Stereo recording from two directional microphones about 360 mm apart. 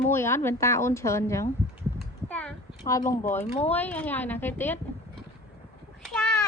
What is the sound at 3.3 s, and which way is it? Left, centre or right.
Speech, centre.